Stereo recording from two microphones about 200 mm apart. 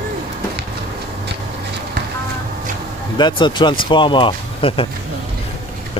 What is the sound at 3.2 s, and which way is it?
Speech, 25° left (ahead or behind).